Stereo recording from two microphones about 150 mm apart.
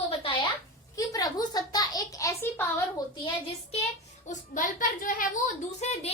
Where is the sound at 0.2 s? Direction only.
35° left (ahead or behind).